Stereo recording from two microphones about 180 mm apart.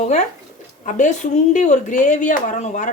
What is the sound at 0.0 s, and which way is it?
Speech, 40° left (ahead or behind).